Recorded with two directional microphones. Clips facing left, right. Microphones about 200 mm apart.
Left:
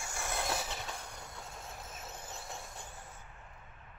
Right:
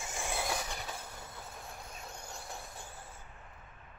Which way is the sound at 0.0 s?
15° right (ahead or behind).